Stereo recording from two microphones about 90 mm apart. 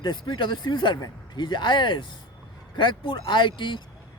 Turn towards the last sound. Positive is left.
turn(degrees=65)  # may be behind; listen again after turning